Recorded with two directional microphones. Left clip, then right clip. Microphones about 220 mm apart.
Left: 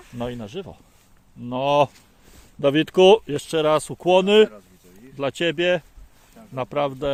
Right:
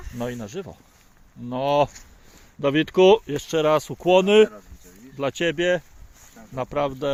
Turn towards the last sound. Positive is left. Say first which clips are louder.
# left 1 dB
turn(degrees=0)  # may be behind; listen again after turning